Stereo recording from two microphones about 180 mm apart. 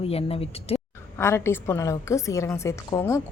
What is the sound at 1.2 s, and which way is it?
A woman's voice, 15° left (ahead or behind).